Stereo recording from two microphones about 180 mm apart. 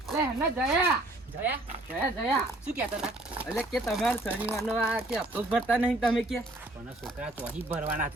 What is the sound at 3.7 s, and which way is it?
Speech, centre (ahead or behind).